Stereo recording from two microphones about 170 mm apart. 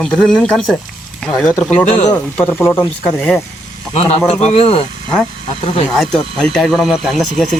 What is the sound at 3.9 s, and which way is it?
Speech, 40° left (ahead or behind).